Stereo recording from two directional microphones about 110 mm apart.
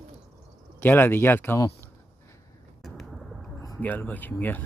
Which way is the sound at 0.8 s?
15° left (ahead or behind).